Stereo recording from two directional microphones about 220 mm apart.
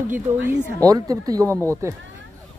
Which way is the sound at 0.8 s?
15° right (ahead or behind).